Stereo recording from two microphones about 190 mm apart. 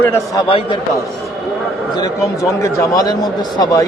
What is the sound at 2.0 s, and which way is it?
A man's voice, 15° left (ahead or behind).